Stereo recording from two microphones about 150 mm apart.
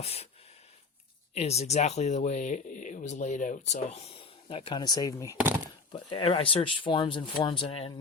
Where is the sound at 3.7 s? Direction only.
45° left (ahead or behind).